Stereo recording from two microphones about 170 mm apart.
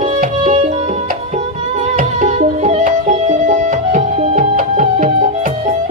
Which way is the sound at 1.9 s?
45° right (ahead or behind).